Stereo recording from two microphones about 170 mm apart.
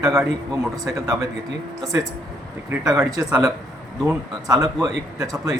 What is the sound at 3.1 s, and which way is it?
Speech, 20° right (ahead or behind).